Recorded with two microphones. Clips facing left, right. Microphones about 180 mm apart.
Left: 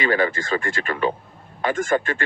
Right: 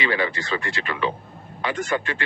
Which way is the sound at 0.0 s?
45° left (ahead or behind).